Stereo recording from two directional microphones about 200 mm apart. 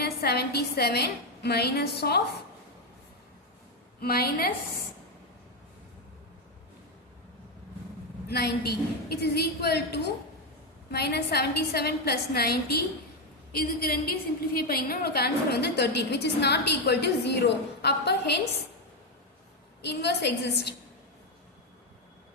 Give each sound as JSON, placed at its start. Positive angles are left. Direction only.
{"t": 0.0, "sound": "a woman's voice", "side_deg": 55}
{"t": 4.0, "sound": "a woman's voice", "side_deg": 50}
{"t": 8.3, "sound": "a woman's voice", "side_deg": 55}
{"t": 19.8, "sound": "a woman's voice", "side_deg": 55}